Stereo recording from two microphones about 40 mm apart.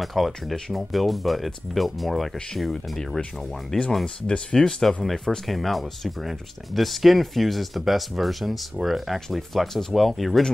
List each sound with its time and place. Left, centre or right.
0.0 s speech: centre
4.0 s speech: centre